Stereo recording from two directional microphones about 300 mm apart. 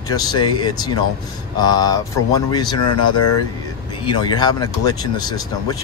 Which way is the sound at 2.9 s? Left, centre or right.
Left.